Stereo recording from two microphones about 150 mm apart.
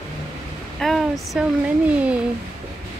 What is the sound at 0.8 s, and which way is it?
Speech, centre (ahead or behind).